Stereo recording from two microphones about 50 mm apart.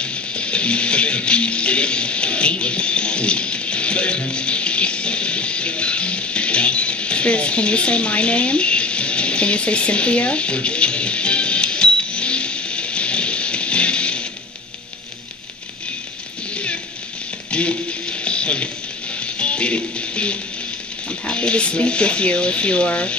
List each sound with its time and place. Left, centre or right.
0.0 s music: left
17.5 s music: left
21.3 s speech: left